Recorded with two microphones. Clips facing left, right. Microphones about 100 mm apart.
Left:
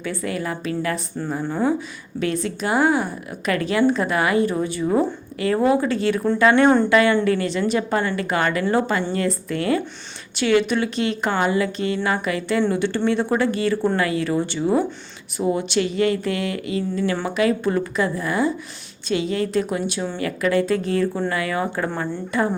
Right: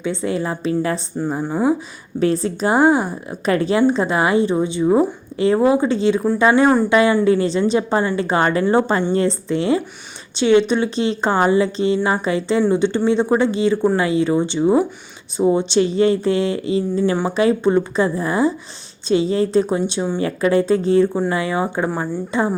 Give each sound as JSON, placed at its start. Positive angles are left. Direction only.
{"t": 0.0, "sound": "speech", "side_deg": -25}
{"t": 1.4, "sound": "speech", "side_deg": -15}
{"t": 2.1, "sound": "speech", "side_deg": -35}
{"t": 6.5, "sound": "speech", "side_deg": -10}
{"t": 6.9, "sound": "speech", "side_deg": -20}
{"t": 17.0, "sound": "speech", "side_deg": -15}
{"t": 17.2, "sound": "speech", "side_deg": -30}